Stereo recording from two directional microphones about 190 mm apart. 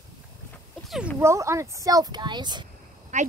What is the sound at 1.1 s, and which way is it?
Speech, 15° right (ahead or behind).